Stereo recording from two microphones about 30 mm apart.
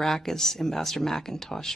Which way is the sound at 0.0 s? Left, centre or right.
Centre.